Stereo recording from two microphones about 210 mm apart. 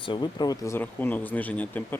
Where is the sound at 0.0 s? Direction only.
20° left (ahead or behind).